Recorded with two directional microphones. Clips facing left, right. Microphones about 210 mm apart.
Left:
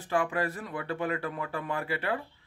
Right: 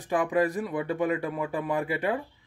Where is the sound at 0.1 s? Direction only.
15° right (ahead or behind).